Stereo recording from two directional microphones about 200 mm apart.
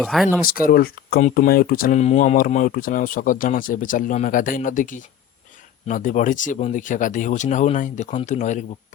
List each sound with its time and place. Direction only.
0.0 s speech: centre (ahead or behind)
0.6 s speech: 50° left (ahead or behind)